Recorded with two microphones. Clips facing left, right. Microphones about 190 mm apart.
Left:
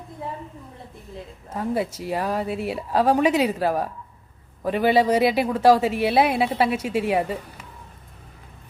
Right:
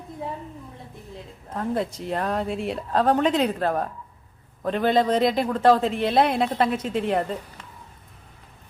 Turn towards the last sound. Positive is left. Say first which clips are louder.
# left 2 dB
turn(degrees=5)  # may be behind; listen again after turning